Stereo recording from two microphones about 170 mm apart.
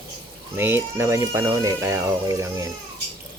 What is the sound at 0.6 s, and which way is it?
Speech, 15° right (ahead or behind).